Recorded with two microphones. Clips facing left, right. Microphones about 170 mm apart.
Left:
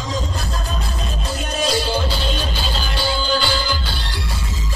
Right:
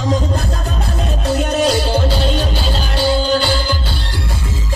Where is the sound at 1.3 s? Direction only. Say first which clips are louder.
Right 6 dB; 60° right (ahead or behind).